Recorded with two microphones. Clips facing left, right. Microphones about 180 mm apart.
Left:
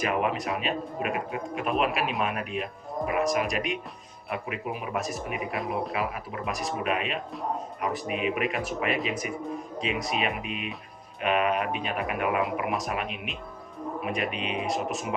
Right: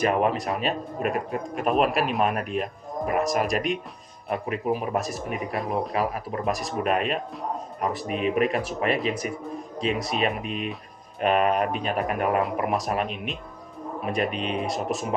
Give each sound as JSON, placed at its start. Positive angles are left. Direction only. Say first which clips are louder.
{"t": 0.0, "sound": "speech", "louder": "right 4 dB", "side_deg": -40}